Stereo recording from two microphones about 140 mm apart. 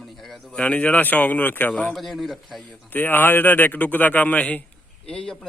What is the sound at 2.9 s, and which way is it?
A man's voice, 15° left (ahead or behind).